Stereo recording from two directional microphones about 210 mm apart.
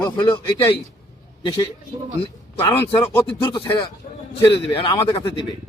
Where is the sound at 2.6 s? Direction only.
15° left (ahead or behind).